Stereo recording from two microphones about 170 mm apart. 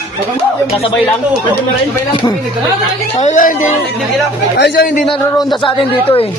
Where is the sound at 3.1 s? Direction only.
45° left (ahead or behind).